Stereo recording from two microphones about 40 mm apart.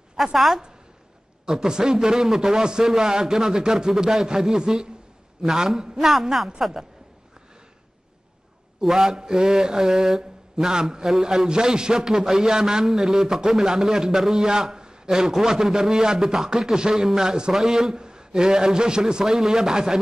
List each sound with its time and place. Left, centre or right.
0.1 s a woman's voice: centre
1.4 s a man's voice: centre
5.9 s a woman's voice: centre
8.8 s a man's voice: centre